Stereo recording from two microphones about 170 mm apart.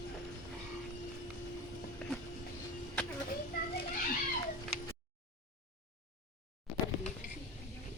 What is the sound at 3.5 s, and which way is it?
Children playing, 60° left (ahead or behind).